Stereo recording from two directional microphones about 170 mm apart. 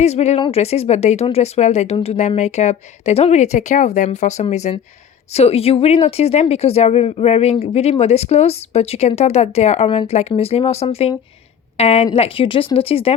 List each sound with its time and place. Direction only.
0.0 s speech: 40° left (ahead or behind)